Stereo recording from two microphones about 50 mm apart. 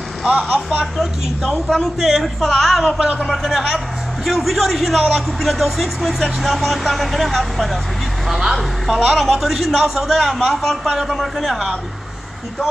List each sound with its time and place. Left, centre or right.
0.3 s speech: right
1.7 s a man's voice: centre
3.5 s a man's voice: centre